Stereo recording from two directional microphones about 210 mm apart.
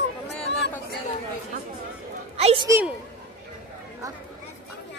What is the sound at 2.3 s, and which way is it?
Speech, 25° right (ahead or behind).